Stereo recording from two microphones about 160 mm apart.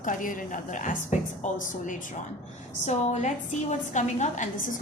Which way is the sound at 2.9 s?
45° left (ahead or behind).